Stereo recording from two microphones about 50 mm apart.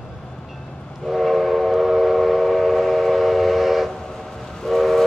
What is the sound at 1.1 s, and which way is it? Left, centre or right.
Train, centre.